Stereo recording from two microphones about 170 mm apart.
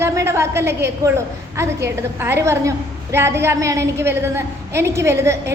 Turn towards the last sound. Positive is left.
turn(degrees=-15)  # may be behind; listen again after turning